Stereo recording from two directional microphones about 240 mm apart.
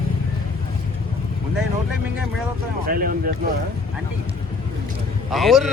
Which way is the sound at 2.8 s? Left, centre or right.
Right.